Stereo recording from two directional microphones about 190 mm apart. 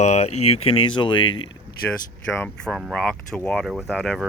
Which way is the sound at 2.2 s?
10° left (ahead or behind).